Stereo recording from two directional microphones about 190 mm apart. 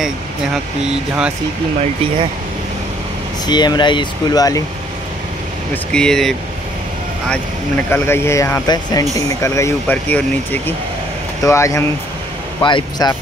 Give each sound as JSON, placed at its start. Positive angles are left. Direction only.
{"t": 3.4, "sound": "speech", "side_deg": 20}
{"t": 5.9, "sound": "speech", "side_deg": 5}